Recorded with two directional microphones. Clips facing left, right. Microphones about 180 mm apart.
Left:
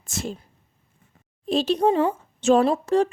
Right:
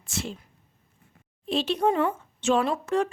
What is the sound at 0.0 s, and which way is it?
Speech, 45° left (ahead or behind).